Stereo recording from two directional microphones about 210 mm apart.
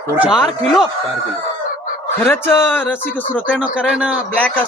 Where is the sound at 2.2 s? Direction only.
10° left (ahead or behind).